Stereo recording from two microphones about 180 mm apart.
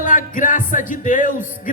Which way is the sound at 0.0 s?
45° left (ahead or behind).